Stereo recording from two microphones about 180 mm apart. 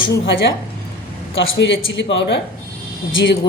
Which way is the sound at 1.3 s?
85° left.